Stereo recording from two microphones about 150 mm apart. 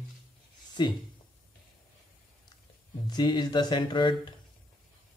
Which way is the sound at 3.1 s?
30° left (ahead or behind).